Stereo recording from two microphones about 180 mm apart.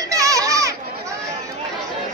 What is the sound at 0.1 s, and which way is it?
Children playing, 20° right (ahead or behind).